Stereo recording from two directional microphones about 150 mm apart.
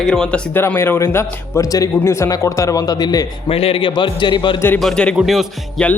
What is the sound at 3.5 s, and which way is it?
A man's voice, 40° left (ahead or behind).